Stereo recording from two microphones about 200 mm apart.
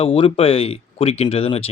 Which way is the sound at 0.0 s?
30° left (ahead or behind).